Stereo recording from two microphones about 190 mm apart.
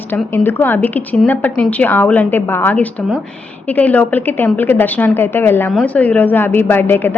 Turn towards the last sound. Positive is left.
turn(degrees=10)  # may be behind; listen again after turning